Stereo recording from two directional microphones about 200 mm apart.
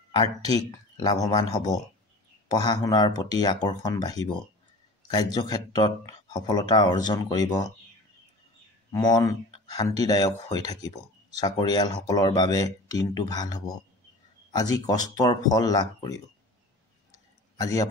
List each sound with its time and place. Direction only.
0.1 s speech: 20° left (ahead or behind)
8.9 s speech: 20° left (ahead or behind)
11.3 s speech: 20° left (ahead or behind)
17.1 s a sound: 15° left (ahead or behind)